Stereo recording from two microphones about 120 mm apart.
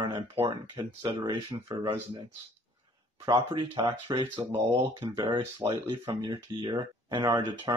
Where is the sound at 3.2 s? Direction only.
40° right (ahead or behind).